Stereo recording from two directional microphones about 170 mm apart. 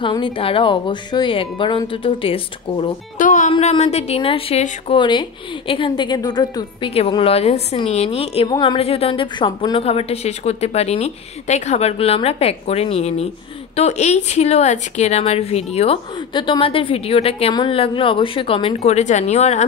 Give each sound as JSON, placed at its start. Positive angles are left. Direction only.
{"t": 0.0, "sound": "speech", "side_deg": 30}
{"t": 3.2, "sound": "music", "side_deg": 50}
{"t": 3.5, "sound": "a woman's voice", "side_deg": 35}
{"t": 4.9, "sound": "a woman's voice", "side_deg": 25}